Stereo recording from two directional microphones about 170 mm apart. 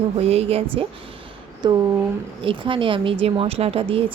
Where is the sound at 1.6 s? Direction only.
25° right (ahead or behind).